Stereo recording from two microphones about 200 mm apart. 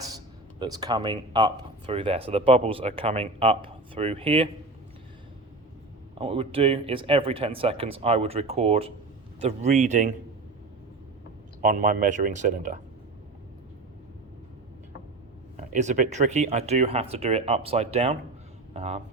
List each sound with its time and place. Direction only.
0.6 s speech: 20° right (ahead or behind)
6.1 s speech: 30° right (ahead or behind)
11.6 s speech: 40° right (ahead or behind)
15.5 s speech: 35° right (ahead or behind)